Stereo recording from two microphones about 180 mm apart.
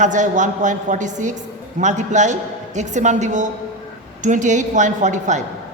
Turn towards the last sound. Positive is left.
turn(degrees=-40)  # may be behind; listen again after turning